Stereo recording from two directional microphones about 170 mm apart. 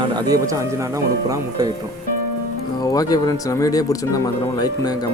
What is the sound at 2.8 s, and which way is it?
Speech, 20° left (ahead or behind).